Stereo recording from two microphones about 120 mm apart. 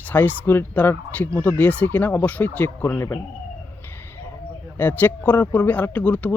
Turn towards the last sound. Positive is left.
turn(degrees=15)  # may be behind; listen again after turning